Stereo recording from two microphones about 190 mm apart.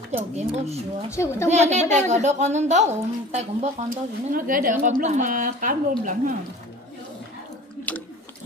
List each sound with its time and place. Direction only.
0.1 s a woman's voice: 30° right (ahead or behind)
1.1 s speech: 15° left (ahead or behind)
1.5 s a woman's voice: 35° right (ahead or behind)
4.5 s a woman's voice: 45° right (ahead or behind)
7.9 s biting: 5° left (ahead or behind)